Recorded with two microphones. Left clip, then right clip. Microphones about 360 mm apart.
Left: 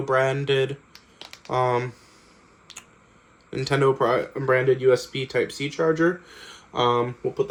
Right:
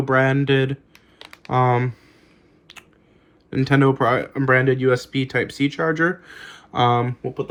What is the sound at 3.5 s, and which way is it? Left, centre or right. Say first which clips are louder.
Speech: right 3 dB; right.